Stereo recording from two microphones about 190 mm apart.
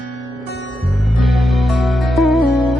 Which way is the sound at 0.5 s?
85° left.